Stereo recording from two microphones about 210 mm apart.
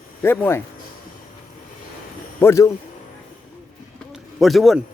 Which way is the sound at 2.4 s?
15° left (ahead or behind).